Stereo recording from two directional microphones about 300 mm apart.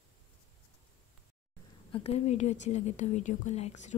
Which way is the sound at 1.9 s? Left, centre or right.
Left.